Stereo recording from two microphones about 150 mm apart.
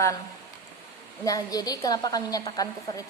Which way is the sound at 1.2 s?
25° left (ahead or behind).